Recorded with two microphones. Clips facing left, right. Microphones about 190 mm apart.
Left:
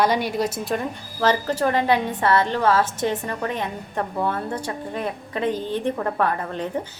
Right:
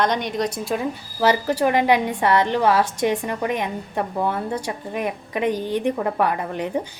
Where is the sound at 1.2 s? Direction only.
10° right (ahead or behind).